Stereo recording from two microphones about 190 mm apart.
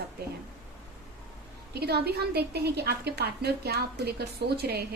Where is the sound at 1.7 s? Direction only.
60° right (ahead or behind).